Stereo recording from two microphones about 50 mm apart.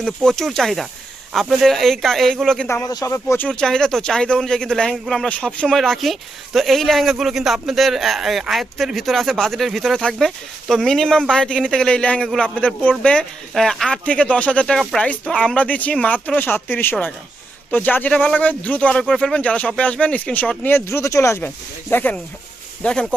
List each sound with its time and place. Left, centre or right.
0.2 s speech: centre
2.6 s speech: left
3.5 s speech: centre
5.4 s speech: left
5.6 s speech: centre
13.5 s speech: centre
14.0 s speech: left
18.9 s speech: centre
19.3 s speech: left
20.3 s speech: left
20.9 s speech: left
21.4 s speech: left
22.8 s speech: centre